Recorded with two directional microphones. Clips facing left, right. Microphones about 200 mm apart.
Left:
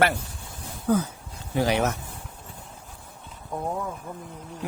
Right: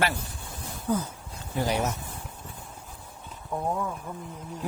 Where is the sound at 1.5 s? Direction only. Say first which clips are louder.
Left 4 dB; 80° left.